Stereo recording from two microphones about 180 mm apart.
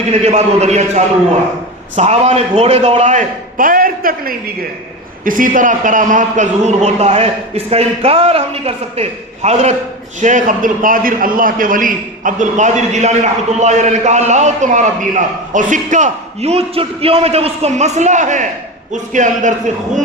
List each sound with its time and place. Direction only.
0.1 s a man's voice: 35° right (ahead or behind)